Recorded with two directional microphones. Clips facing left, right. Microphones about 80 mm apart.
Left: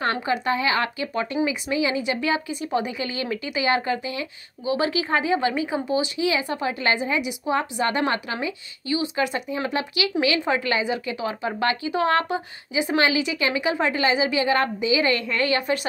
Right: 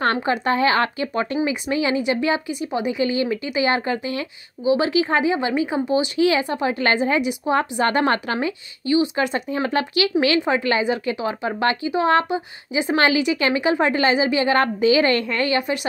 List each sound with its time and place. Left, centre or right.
0.0 s a woman's voice: right
2.0 s speech: right
4.6 s speech: right
6.1 s a woman's voice: right
6.4 s speech: right
6.8 s a woman's voice: right
7.2 s speech: right
8.1 s a woman's voice: right
12.9 s a woman's voice: right
15.2 s speech: right
15.6 s speech: centre